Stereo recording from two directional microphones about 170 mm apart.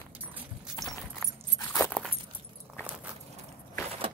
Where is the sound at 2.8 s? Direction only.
15° left (ahead or behind).